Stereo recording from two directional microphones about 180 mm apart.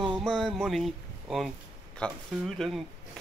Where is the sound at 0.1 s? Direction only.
Centre (ahead or behind).